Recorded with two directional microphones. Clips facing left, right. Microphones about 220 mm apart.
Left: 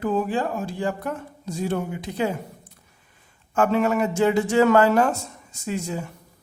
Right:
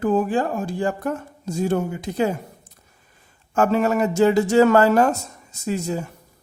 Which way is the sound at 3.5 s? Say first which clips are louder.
Right 2 dB; 40° right (ahead or behind).